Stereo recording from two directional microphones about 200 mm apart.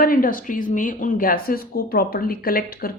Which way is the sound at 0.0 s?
45° left (ahead or behind).